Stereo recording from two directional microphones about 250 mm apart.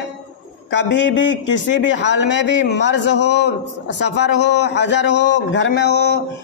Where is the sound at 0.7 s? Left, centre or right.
Left.